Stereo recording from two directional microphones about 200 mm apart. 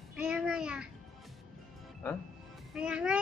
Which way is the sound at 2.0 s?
10° left (ahead or behind).